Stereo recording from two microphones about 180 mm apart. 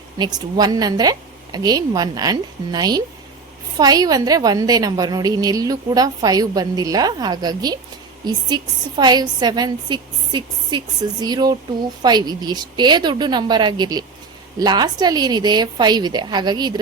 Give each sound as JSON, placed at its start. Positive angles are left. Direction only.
{"t": 0.2, "sound": "a woman's voice", "side_deg": -20}